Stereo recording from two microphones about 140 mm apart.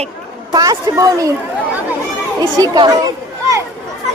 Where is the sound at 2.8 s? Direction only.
25° right (ahead or behind).